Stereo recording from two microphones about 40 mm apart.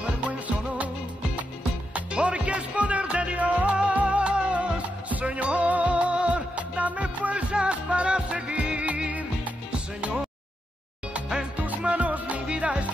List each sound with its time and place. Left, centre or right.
0.3 s music: right
2.1 s music: right
3.3 s music: right
11.6 s music: right